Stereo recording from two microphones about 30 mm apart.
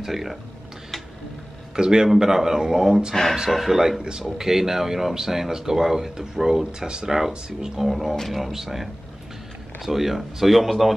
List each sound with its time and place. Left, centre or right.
0.0 s speech: centre
1.8 s speech: centre
3.4 s speech: centre; by 7.8 s right
7.8 s speech: centre
9.8 s speech: centre